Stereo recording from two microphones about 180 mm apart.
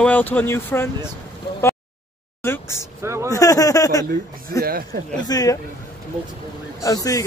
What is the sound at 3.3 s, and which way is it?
Speech, 20° left (ahead or behind).